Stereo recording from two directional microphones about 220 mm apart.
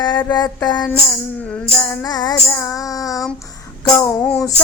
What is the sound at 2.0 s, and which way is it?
Music, 15° left (ahead or behind).